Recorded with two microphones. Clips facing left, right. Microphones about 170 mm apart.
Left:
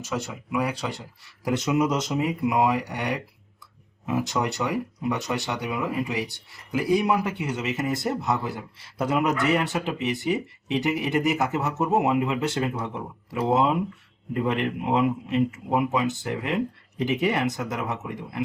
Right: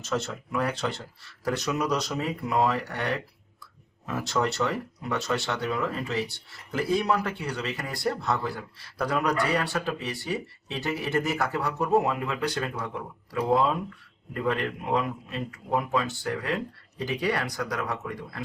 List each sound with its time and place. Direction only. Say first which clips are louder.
0.0 s speech: right 1 dB; 10° left (ahead or behind)